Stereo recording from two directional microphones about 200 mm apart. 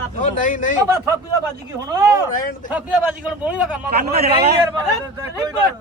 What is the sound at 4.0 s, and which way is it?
Speech, 50° right (ahead or behind).